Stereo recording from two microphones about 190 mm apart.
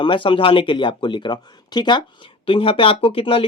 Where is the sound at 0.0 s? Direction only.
25° left (ahead or behind).